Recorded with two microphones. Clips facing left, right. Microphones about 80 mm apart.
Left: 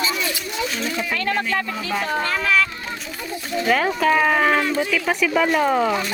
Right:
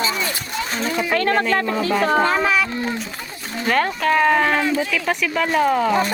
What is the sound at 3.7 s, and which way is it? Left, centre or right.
Speech, centre.